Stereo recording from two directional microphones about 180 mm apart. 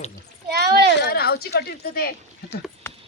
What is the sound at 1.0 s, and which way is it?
Speech, 60° left (ahead or behind).